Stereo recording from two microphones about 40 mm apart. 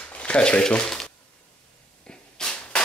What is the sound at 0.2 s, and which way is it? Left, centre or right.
Speech, left.